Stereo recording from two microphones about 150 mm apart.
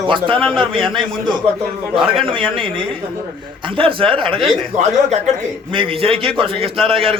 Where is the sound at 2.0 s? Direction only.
35° right (ahead or behind).